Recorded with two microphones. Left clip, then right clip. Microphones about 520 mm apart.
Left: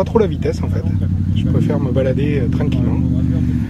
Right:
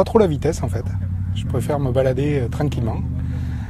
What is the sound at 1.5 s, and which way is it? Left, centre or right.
Speech, right.